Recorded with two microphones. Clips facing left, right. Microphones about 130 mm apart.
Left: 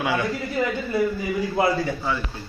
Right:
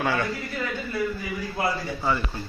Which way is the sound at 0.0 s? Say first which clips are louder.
Left 1 dB; 15° left (ahead or behind).